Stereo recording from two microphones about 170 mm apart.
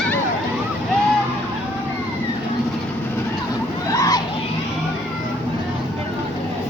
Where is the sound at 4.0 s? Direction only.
20° left (ahead or behind).